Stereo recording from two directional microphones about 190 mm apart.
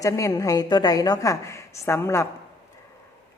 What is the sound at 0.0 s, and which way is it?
A woman's voice, 15° left (ahead or behind).